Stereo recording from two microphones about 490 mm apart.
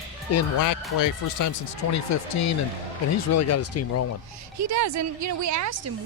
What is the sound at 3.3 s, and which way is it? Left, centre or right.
Speech, left.